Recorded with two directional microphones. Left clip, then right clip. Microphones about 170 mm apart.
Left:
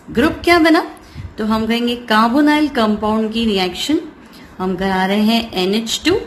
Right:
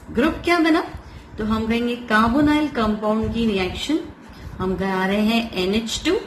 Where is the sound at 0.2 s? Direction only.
45° left (ahead or behind).